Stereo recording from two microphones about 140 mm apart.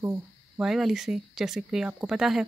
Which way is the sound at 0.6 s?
Centre (ahead or behind).